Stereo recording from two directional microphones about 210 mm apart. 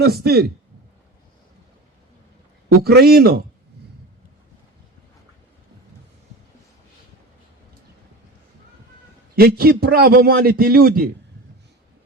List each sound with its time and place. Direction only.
0.0 s a man's voice: 50° right (ahead or behind)
2.6 s a man's voice: 45° right (ahead or behind)
9.3 s a man's voice: 45° right (ahead or behind)